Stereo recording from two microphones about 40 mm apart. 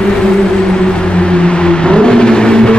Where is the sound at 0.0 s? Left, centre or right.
Centre.